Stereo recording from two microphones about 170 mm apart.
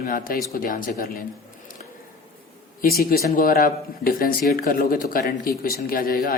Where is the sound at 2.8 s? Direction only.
60° left (ahead or behind).